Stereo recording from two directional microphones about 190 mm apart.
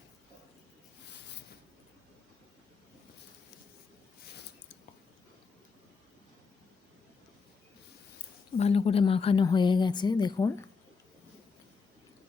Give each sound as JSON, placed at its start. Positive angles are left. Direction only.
{"t": 8.5, "sound": "a woman's voice", "side_deg": 30}